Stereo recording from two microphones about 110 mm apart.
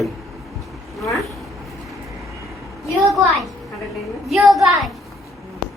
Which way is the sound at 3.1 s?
Centre (ahead or behind).